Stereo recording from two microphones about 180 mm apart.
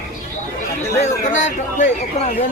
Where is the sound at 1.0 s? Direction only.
40° left (ahead or behind).